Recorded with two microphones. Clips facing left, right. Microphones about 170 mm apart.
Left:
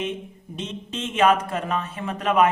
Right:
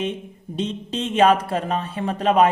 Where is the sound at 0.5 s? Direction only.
35° right (ahead or behind).